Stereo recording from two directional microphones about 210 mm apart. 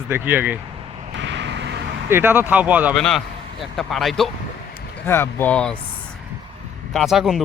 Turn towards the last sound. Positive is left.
turn(degrees=0)  # may be behind; listen again after turning